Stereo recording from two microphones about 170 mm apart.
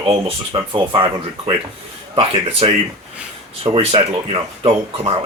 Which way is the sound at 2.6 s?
30° right (ahead or behind).